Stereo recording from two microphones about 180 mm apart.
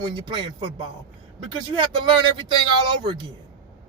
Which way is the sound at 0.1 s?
25° right (ahead or behind).